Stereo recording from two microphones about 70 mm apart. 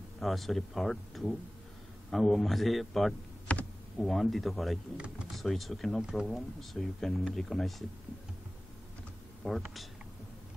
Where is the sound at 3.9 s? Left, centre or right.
Centre.